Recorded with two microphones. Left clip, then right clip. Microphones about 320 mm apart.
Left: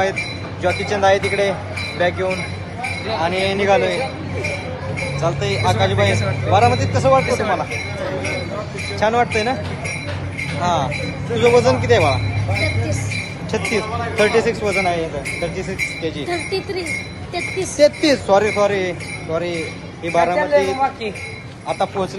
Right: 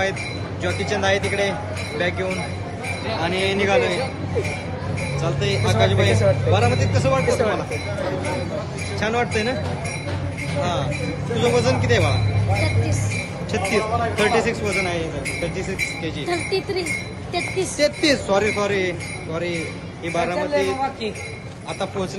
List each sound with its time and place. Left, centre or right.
0.6 s a man's voice: centre
5.2 s speech: centre
9.0 s speech: centre
10.6 s a man's voice: centre
13.5 s speech: centre
16.3 s speech: centre
17.7 s speech: centre
20.3 s a man's voice: centre